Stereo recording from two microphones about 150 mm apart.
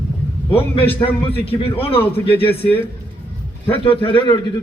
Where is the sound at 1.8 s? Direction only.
40° left (ahead or behind).